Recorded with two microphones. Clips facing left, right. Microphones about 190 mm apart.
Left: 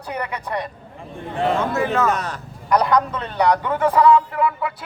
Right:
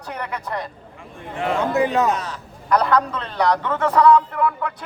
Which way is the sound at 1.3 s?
35° left (ahead or behind).